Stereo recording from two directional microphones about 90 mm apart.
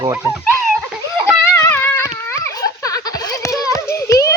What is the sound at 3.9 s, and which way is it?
Music, 35° left (ahead or behind).